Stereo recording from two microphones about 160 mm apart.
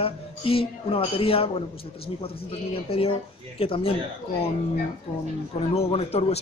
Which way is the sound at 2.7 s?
35° left (ahead or behind).